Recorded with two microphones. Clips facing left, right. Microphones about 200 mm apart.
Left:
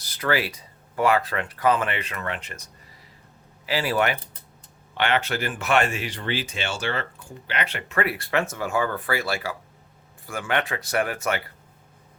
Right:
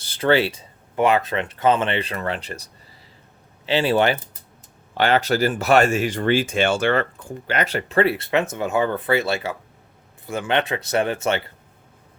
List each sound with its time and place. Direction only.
0.0 s speech: 30° right (ahead or behind)
3.7 s speech: 25° right (ahead or behind)